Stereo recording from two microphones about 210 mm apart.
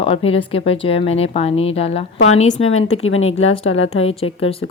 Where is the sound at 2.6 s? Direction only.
80° left.